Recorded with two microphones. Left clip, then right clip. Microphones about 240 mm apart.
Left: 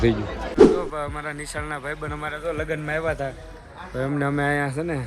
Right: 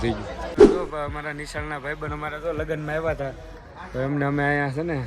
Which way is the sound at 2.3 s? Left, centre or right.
Centre.